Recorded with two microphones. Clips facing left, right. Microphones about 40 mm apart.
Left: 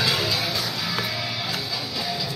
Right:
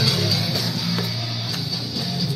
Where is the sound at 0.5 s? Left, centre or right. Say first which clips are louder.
Right 1 dB; centre.